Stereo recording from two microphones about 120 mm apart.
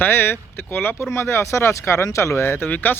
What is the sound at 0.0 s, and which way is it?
Speech, 20° left (ahead or behind).